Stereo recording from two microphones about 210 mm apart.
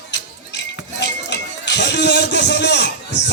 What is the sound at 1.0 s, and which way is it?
Music, 55° left (ahead or behind).